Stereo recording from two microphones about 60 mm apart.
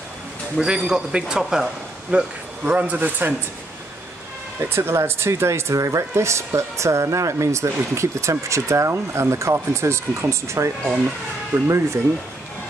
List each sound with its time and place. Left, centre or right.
0.6 s a man's voice: centre
2.0 s speech: centre
2.7 s speech: right
4.6 s speech: right